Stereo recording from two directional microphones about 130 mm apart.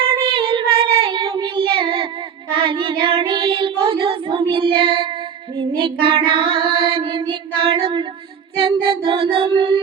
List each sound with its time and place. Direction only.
0.3 s child singing: 40° right (ahead or behind)
5.8 s music: 40° right (ahead or behind)
8.5 s child singing: 40° right (ahead or behind)